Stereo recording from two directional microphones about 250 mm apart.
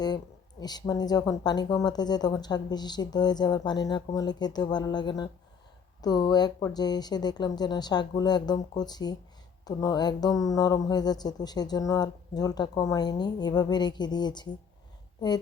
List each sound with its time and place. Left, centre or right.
0.6 s speech: centre